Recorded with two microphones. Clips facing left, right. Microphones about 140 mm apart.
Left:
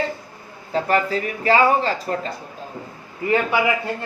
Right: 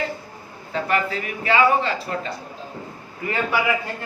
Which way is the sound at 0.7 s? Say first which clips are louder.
Left 3 dB; 35° left (ahead or behind).